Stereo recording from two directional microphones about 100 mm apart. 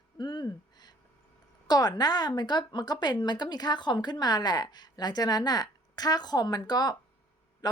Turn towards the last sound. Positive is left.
turn(degrees=45)  # may be behind; listen again after turning